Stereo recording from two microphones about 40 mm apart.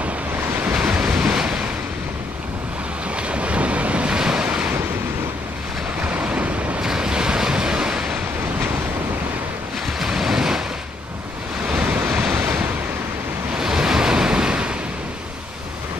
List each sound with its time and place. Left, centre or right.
0.7 s waves: right
3.2 s waves: right
6.0 s waves: right
6.8 s waves: centre
9.9 s waves: centre
11.7 s waves: right
13.6 s waves: centre